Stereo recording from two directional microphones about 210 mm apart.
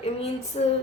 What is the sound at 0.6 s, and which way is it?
Female singing, 30° left (ahead or behind).